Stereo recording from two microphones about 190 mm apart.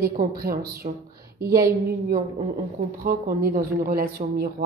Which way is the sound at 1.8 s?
55° right (ahead or behind).